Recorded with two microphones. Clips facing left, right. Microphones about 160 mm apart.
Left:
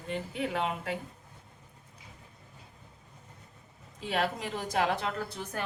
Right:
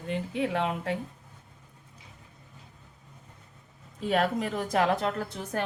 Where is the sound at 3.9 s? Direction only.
50° right (ahead or behind).